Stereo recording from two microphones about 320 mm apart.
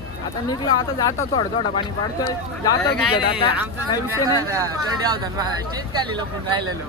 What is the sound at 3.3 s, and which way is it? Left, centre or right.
Speech, centre.